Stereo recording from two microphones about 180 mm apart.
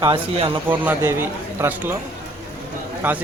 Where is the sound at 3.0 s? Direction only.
10° right (ahead or behind).